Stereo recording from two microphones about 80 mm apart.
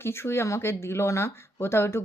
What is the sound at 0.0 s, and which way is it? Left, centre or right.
Speech, left.